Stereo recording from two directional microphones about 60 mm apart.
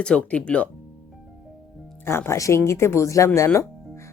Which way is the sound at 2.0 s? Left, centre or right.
Left.